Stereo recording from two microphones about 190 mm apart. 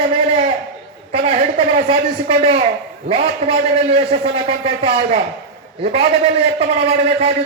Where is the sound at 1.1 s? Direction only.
30° right (ahead or behind).